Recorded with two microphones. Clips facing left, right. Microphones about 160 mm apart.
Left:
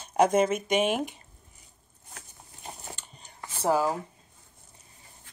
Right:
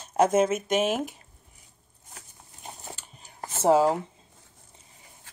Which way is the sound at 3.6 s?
25° right (ahead or behind).